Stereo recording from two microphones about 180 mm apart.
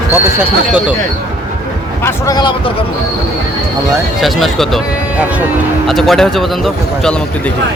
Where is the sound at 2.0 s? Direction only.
20° left (ahead or behind).